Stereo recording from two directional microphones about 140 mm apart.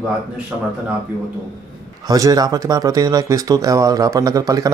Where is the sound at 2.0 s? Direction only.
25° right (ahead or behind).